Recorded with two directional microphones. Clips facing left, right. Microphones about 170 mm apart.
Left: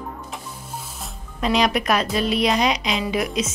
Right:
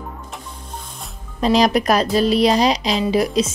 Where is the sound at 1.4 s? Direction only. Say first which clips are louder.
Right 5 dB; 35° right (ahead or behind).